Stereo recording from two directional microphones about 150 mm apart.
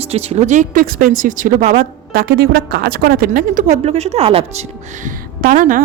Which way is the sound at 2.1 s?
90° right.